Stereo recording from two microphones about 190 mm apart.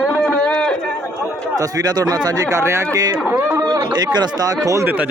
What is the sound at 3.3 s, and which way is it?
Speech, 15° right (ahead or behind).